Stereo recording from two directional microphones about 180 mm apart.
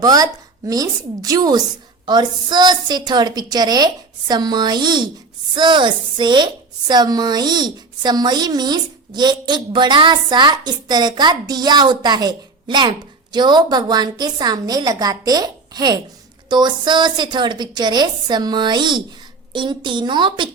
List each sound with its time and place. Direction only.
0.0 s a woman's voice: 20° right (ahead or behind)